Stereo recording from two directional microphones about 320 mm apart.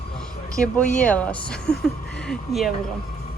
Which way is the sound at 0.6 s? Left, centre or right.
Centre.